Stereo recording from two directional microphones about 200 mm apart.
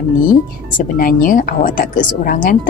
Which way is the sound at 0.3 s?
45° left (ahead or behind).